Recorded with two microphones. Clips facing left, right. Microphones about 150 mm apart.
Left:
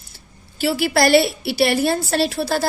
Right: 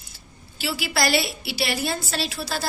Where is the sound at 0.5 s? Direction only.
55° left (ahead or behind).